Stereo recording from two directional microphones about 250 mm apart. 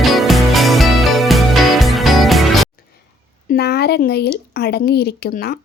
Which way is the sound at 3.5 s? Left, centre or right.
Left.